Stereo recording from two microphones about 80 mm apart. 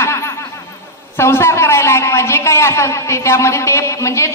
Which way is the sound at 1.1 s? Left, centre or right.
Left.